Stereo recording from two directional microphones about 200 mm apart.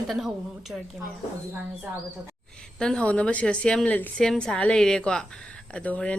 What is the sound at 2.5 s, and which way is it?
A woman's voice, 5° left (ahead or behind).